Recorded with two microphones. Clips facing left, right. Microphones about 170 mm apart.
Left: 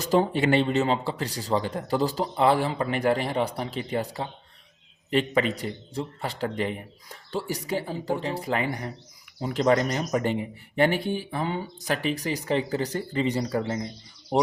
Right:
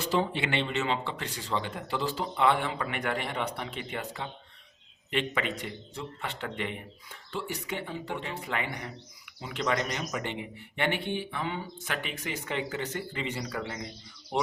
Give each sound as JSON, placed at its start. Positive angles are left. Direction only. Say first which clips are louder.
{"t": 0.0, "sound": "speech", "louder": "left 6 dB", "side_deg": 45}